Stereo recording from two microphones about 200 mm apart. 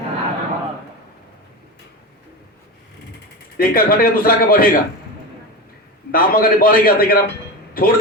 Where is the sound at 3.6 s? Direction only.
45° left (ahead or behind).